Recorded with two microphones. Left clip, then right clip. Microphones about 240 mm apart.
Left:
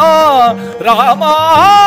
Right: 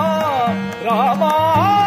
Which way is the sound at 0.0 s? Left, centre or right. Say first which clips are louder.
Left 11 dB; left.